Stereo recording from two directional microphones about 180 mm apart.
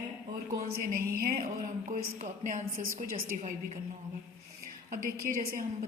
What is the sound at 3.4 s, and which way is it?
Speech, 40° right (ahead or behind).